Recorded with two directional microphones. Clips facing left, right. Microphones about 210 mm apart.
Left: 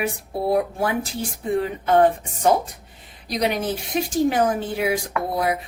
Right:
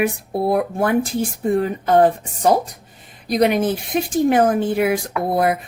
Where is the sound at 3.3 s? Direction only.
55° right (ahead or behind).